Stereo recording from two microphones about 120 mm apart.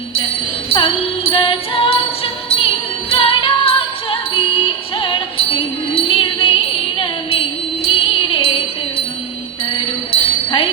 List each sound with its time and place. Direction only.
0.7 s music: 50° left (ahead or behind)
9.7 s music: 45° left (ahead or behind)